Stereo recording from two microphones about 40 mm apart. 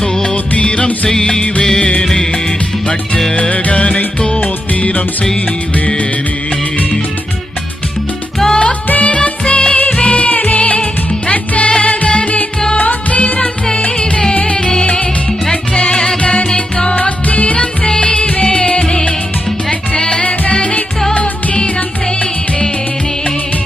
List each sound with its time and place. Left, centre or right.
0.0 s music of bollywood: centre
0.3 s music: left
1.1 s music: centre
1.4 s music of bollywood: left
2.0 s music: centre
3.3 s music: left
8.4 s music: centre
8.9 s music: left
10.2 s music: left
13.9 s music: left
16.6 s music: centre
16.9 s music: left